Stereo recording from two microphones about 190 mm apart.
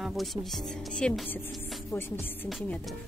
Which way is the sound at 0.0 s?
Centre (ahead or behind).